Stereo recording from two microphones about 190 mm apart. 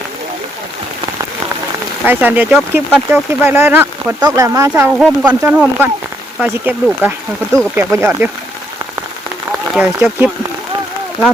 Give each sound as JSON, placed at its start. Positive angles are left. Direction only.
{"t": 2.0, "sound": "speech", "side_deg": -10}
{"t": 9.7, "sound": "speech", "side_deg": -5}